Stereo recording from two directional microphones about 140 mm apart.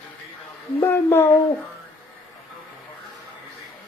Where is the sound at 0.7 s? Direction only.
20° left (ahead or behind).